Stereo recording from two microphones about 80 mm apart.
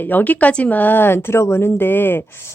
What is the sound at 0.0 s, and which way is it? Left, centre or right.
Speech, left.